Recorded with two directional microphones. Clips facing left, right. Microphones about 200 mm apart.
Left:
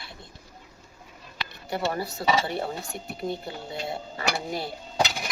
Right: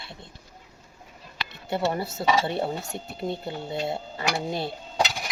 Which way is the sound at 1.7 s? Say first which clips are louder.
Right 2 dB; 25° right (ahead or behind).